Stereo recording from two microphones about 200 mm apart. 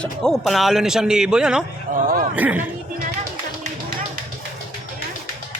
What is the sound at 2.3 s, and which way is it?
Speech, 10° right (ahead or behind).